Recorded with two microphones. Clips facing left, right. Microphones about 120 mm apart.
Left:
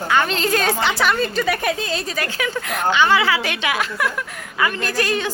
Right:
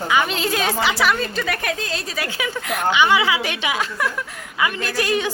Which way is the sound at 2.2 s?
10° right (ahead or behind).